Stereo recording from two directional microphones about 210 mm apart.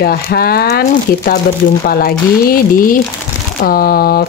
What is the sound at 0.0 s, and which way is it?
Speech, 45° left (ahead or behind).